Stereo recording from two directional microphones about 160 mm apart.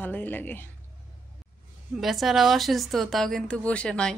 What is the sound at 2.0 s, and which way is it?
A woman's voice, centre (ahead or behind).